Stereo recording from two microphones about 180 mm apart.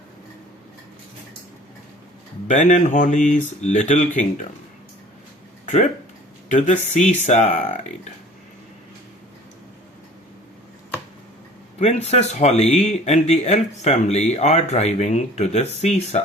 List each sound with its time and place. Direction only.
2.5 s speech: 45° left (ahead or behind)
5.6 s speech: 40° left (ahead or behind)
11.8 s speech: 35° left (ahead or behind)